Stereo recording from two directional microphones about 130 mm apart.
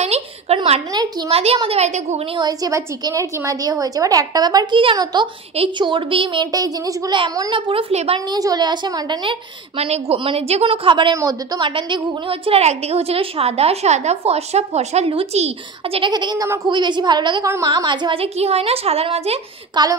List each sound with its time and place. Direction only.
0.0 s a sound: 55° right (ahead or behind)
1.3 s a woman's voice: 50° right (ahead or behind)
1.7 s a woman's voice: 60° right (ahead or behind)
2.3 s a woman's voice: 30° right (ahead or behind)
7.9 s a woman's voice: 55° right (ahead or behind)
8.3 s a woman's voice: 30° right (ahead or behind)
11.1 s a woman's voice: 25° right (ahead or behind)
11.6 s a woman's voice: 40° right (ahead or behind)
16.0 s a woman's voice: 35° right (ahead or behind); by 19.4 s 50° right (ahead or behind)
19.7 s a woman's voice: 30° right (ahead or behind)